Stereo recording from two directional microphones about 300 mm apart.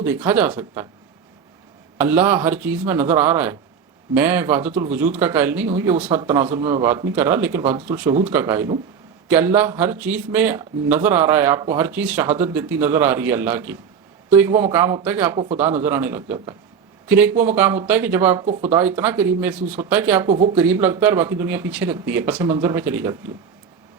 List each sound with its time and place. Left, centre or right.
0.0 s speech: centre
2.0 s speech: centre
20.3 s speech: centre
20.6 s speech: centre